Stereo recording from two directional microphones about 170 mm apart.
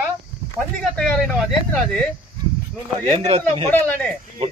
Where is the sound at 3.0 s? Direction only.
40° right (ahead or behind).